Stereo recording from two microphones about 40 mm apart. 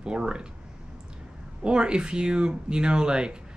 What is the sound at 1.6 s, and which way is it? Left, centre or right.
Speech, right.